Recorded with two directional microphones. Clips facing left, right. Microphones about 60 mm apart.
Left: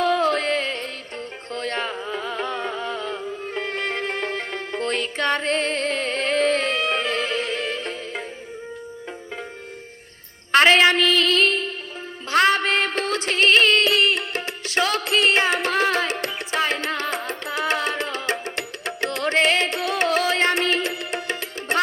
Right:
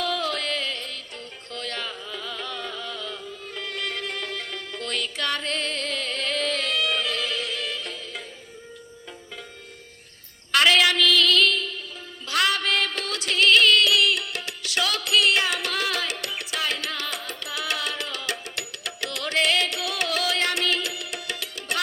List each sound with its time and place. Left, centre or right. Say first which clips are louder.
0.0 s music: left 7 dB; left
10.5 s a sound: left 5 dB; left
12.3 s music: left 5 dB; left